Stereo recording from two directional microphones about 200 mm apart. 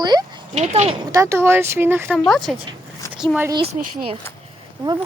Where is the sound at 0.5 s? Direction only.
35° right (ahead or behind).